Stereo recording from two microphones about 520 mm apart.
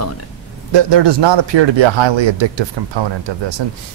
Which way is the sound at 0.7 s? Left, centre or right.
Right.